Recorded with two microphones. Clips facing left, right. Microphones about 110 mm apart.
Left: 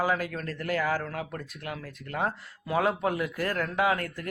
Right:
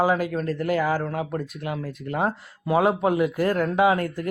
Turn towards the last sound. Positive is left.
turn(degrees=-20)  # may be behind; listen again after turning